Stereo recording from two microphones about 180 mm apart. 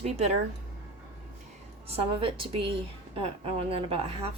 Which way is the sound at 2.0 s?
30° right (ahead or behind).